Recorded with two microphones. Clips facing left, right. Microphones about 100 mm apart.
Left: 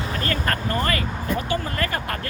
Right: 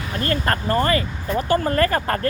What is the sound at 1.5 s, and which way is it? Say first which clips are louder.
Speech: right 7 dB; 45° right (ahead or behind).